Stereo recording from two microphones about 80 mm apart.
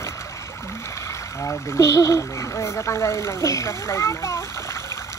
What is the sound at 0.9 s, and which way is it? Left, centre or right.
Speech, left.